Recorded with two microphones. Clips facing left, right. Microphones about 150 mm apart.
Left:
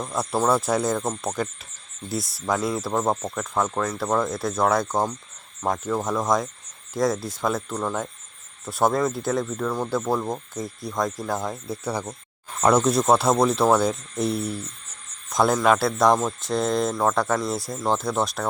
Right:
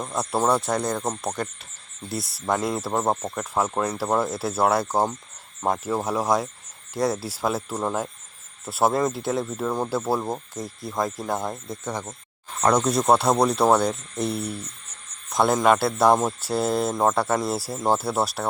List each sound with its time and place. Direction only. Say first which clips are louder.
0.0 s speech: even; centre (ahead or behind)
9.5 s speech: even; 15° right (ahead or behind)
9.8 s speech: left 1 dB; 5° right (ahead or behind)